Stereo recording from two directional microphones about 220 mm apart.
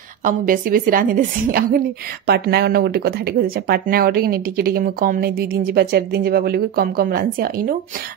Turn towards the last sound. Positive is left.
turn(degrees=-40)  # may be behind; listen again after turning